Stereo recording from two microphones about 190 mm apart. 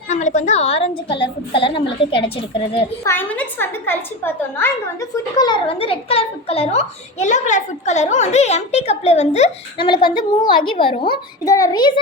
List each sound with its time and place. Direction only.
0.1 s a woman's voice: 40° left (ahead or behind)
3.0 s a woman's voice: 10° left (ahead or behind)